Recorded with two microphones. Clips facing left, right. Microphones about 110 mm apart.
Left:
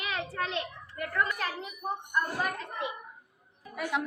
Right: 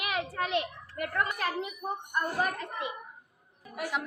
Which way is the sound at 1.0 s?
15° right (ahead or behind).